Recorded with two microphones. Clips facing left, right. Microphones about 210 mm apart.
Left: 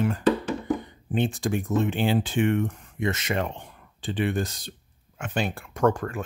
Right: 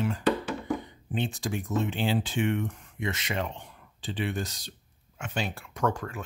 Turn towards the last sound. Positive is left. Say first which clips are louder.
# left 6 dB
turn(degrees=50)  # may be behind; listen again after turning